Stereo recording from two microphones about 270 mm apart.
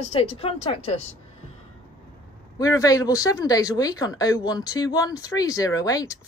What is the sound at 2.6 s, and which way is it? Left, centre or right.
Speech, centre.